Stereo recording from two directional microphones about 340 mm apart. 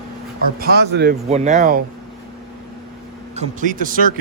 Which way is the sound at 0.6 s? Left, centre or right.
Right.